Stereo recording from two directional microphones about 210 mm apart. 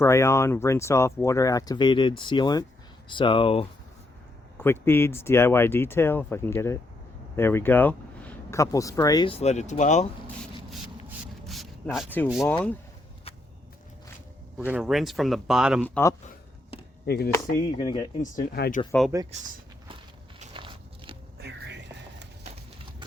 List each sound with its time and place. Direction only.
0.0 s speech: 15° left (ahead or behind)
4.5 s speech: 10° left (ahead or behind); by 10.1 s 35° left (ahead or behind)
11.4 s a sound: centre (ahead or behind)
12.3 s speech: centre (ahead or behind)
14.7 s speech: centre (ahead or behind)
17.1 s speech: 50° left (ahead or behind)
17.6 s speech: 20° left (ahead or behind)
18.2 s speech: 45° left (ahead or behind)
19.1 s speech: 15° right (ahead or behind)
20.4 s walk: 25° right (ahead or behind)